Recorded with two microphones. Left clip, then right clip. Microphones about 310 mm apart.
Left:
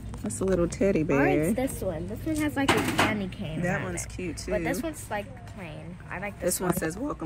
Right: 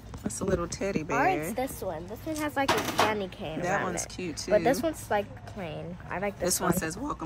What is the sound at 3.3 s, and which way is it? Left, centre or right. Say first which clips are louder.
A woman's voice: right 1 dB; right.